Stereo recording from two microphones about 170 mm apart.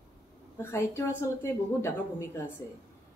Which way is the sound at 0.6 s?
15° left (ahead or behind).